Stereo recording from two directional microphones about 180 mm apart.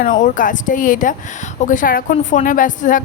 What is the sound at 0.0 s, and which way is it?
A woman's voice, 45° left (ahead or behind).